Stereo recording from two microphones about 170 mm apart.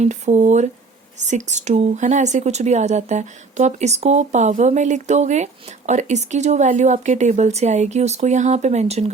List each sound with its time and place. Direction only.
0.0 s speech: 45° right (ahead or behind)